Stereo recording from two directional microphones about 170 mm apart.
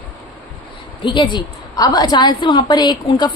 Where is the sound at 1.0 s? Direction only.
25° left (ahead or behind).